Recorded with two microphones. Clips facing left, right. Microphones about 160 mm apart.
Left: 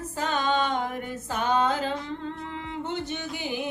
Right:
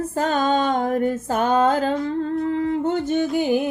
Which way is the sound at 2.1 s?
45° right (ahead or behind).